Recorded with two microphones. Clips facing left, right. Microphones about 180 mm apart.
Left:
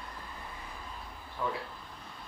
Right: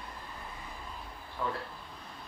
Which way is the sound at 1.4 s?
Centre (ahead or behind).